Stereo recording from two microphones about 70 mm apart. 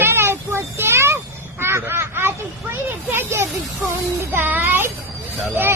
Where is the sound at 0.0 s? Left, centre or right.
Right.